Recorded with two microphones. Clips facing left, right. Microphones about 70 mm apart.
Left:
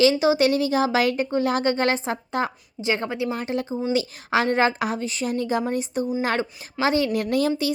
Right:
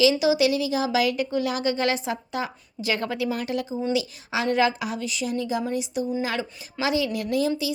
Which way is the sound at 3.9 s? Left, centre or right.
Left.